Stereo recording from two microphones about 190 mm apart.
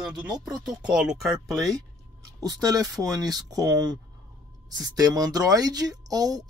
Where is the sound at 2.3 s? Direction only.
20° right (ahead or behind).